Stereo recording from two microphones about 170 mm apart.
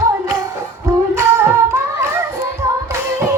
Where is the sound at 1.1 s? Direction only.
15° right (ahead or behind).